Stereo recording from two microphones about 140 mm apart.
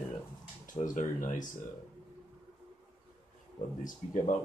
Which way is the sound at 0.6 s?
70° left (ahead or behind).